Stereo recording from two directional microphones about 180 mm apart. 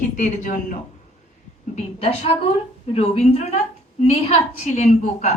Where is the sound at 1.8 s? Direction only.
35° left (ahead or behind).